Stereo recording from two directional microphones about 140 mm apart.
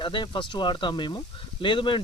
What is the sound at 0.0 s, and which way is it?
Speech, 35° left (ahead or behind).